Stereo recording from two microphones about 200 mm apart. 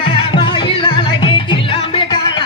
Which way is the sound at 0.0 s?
25° left (ahead or behind).